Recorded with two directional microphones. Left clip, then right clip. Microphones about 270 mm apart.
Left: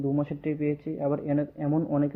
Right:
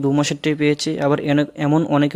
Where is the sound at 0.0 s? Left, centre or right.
Right.